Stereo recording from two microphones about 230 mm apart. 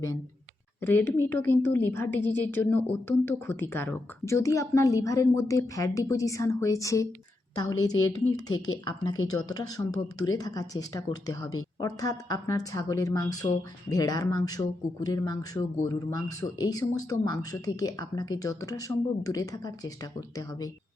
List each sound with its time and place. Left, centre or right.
0.8 s a woman's voice: centre